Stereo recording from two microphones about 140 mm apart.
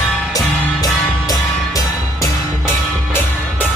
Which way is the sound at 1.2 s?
25° left (ahead or behind).